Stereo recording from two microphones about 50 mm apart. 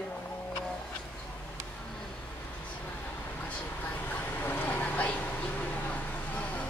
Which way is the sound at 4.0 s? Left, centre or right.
Left.